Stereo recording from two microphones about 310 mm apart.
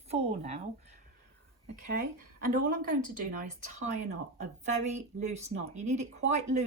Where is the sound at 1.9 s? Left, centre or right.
Right.